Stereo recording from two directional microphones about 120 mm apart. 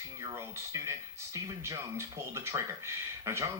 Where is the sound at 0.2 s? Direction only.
25° right (ahead or behind).